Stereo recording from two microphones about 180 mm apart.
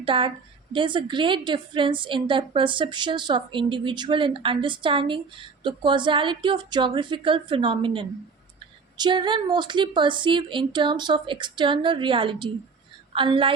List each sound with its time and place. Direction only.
0.0 s a woman's voice: 30° right (ahead or behind)